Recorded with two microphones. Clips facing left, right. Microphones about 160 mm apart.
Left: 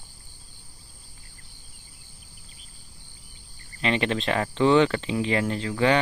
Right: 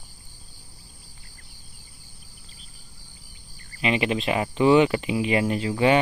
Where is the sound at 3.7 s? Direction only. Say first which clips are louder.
Right 1 dB; 10° right (ahead or behind).